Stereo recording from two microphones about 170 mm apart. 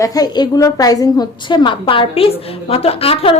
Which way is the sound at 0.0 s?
20° left (ahead or behind).